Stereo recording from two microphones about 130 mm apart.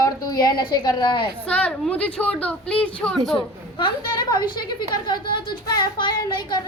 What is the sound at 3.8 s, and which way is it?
A woman's voice, 35° left (ahead or behind).